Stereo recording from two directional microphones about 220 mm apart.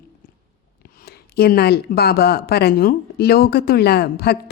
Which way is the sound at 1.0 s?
45° left (ahead or behind).